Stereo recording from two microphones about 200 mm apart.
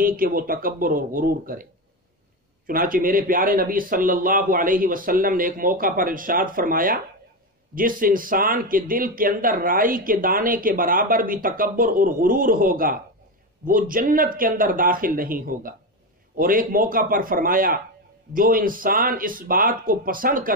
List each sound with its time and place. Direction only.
0.0 s speech: 45° right (ahead or behind)